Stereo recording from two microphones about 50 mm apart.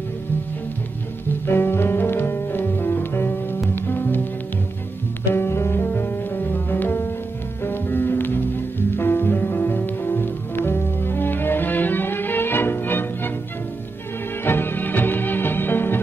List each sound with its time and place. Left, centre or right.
1.4 s music: left
5.3 s music: left
5.8 s music: left
14.4 s music: left